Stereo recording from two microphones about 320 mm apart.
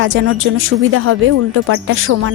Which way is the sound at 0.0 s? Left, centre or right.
Right.